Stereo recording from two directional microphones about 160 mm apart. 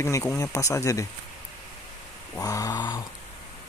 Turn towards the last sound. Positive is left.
turn(degrees=20)  # may be behind; listen again after turning